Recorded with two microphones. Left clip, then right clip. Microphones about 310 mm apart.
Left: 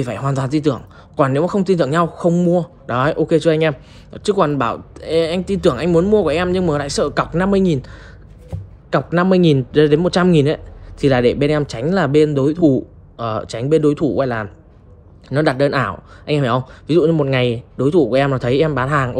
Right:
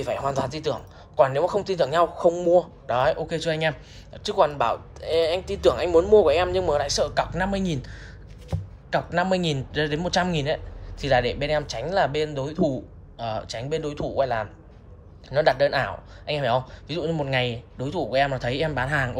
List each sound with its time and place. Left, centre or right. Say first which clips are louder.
0.0 s speech: left 3 dB; left